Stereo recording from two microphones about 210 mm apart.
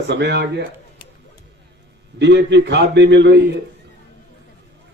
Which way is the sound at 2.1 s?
55° right (ahead or behind).